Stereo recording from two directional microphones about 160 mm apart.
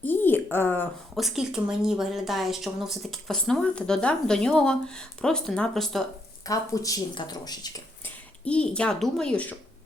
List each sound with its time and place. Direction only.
0.0 s a sound: 10° left (ahead or behind)
1.1 s speech: centre (ahead or behind)
6.4 s speech: 20° left (ahead or behind)
8.0 s speech: 5° left (ahead or behind)